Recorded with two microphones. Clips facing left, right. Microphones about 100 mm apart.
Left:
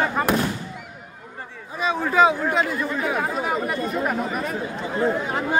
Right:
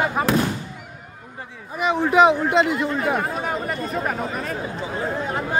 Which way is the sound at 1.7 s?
15° right (ahead or behind).